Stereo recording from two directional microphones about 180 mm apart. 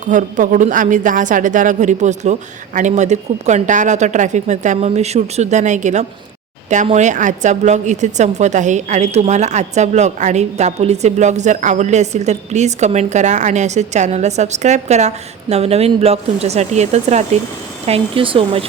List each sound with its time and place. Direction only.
0.0 s a woman's voice: 45° right (ahead or behind); by 18.6 s 30° right (ahead or behind)